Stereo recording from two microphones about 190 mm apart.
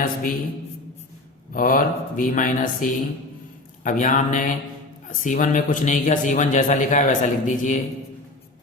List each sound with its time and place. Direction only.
0.0 s speech: 45° left (ahead or behind)
1.5 s a man's voice: 45° left (ahead or behind)